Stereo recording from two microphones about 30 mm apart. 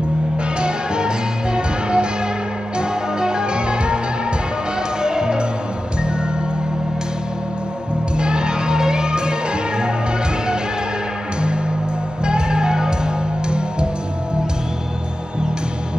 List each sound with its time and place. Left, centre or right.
0.6 s music: right
5.0 s music: right
8.2 s music: right
12.3 s music: right